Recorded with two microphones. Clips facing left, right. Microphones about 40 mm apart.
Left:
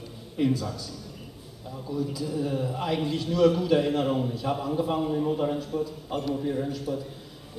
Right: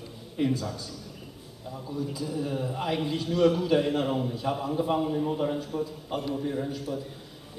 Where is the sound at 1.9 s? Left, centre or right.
Centre.